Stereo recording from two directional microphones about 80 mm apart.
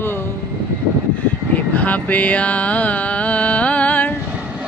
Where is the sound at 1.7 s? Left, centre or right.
Centre.